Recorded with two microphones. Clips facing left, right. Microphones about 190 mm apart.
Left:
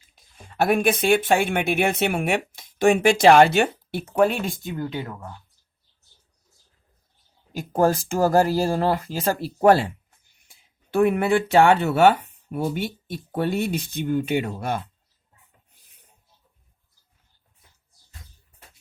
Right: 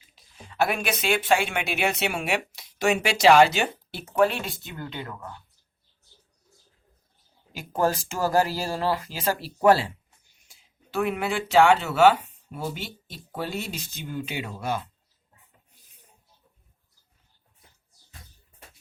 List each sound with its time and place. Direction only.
0.2 s speech: 50° left (ahead or behind)
4.7 s speech: 10° left (ahead or behind)
7.5 s speech: 45° left (ahead or behind)